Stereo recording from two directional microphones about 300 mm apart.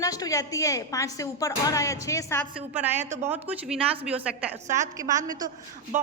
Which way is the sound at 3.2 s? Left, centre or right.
Centre.